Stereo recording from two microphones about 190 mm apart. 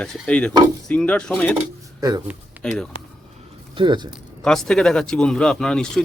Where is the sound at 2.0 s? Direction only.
20° right (ahead or behind).